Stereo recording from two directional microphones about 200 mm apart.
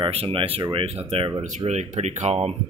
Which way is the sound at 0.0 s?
25° right (ahead or behind).